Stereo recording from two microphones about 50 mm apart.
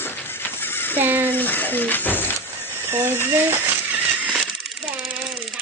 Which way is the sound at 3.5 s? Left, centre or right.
Right.